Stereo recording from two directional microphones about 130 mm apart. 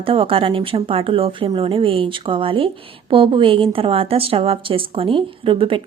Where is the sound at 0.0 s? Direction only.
45° right (ahead or behind).